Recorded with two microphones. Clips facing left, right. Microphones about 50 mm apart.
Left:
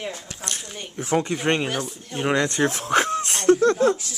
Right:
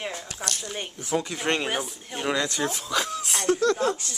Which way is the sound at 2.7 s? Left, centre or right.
Left.